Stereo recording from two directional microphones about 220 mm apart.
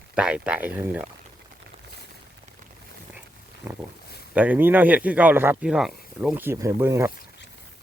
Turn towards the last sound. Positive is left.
turn(degrees=-10)  # may be behind; listen again after turning